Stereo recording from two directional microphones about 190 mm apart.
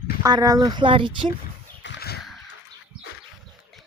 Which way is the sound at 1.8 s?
60° left (ahead or behind).